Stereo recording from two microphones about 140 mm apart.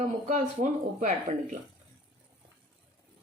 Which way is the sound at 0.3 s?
65° right (ahead or behind).